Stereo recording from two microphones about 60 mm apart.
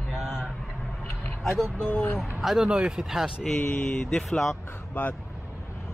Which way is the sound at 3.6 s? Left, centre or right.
Left.